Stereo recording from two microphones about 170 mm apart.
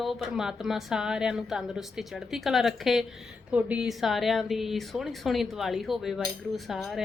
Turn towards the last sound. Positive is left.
turn(degrees=0)  # may be behind; listen again after turning